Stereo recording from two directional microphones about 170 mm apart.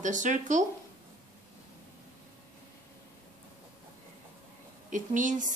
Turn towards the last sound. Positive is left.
turn(degrees=-50)  # may be behind; listen again after turning